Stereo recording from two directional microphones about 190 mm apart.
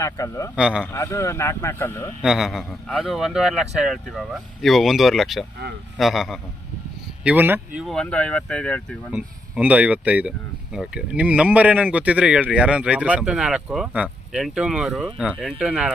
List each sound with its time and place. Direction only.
0.0 s a man's voice: 15° left (ahead or behind)
0.6 s a man's voice: 5° right (ahead or behind)
0.9 s a man's voice: 15° left (ahead or behind)
2.2 s a man's voice: 5° right (ahead or behind)
7.8 s a man's voice: 5° left (ahead or behind)
9.1 s a man's voice: 5° right (ahead or behind)